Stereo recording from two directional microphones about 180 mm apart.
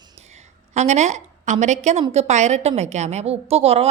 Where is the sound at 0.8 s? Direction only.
40° right (ahead or behind).